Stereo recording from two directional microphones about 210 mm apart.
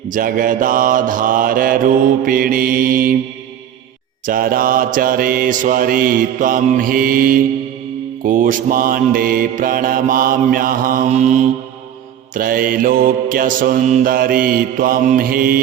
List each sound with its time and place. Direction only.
0.1 s mantra: 40° right (ahead or behind)
4.3 s mantra: 45° right (ahead or behind)